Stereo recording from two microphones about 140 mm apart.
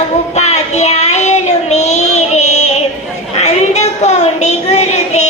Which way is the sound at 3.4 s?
55° left (ahead or behind).